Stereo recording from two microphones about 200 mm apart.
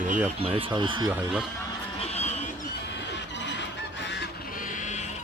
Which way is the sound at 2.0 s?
30° left (ahead or behind).